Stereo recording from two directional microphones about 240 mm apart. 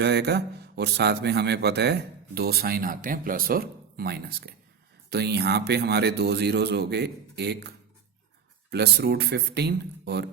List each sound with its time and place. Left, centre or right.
0.0 s a man's voice: right
8.7 s a man's voice: right